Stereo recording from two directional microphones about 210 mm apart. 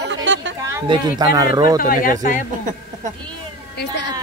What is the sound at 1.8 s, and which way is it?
Speech, 40° left (ahead or behind).